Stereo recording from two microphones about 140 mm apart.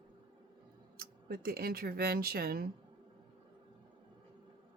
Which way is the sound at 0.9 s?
90° right.